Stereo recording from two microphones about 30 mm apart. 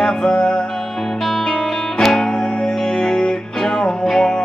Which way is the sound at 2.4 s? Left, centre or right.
Left.